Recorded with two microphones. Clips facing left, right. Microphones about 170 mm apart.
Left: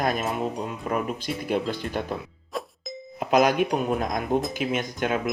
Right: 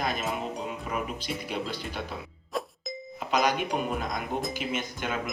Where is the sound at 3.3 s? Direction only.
50° left (ahead or behind).